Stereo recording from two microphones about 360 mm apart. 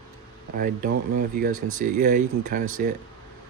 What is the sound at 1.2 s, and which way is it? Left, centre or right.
Speech, right.